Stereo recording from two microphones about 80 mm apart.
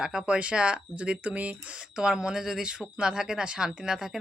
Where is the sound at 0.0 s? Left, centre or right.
Centre.